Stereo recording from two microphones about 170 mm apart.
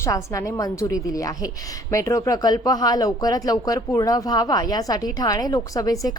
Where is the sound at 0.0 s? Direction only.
15° left (ahead or behind).